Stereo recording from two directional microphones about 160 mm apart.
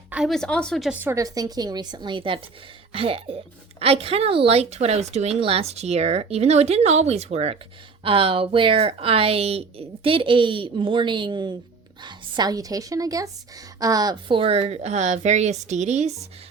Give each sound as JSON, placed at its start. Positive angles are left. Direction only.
{"t": 0.1, "sound": "speech", "side_deg": 0}
{"t": 0.9, "sound": "a woman's voice", "side_deg": -15}